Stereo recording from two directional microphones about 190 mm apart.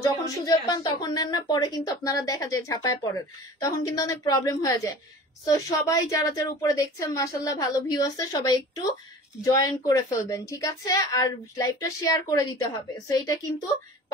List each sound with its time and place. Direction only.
0.0 s a woman's voice: 20° left (ahead or behind)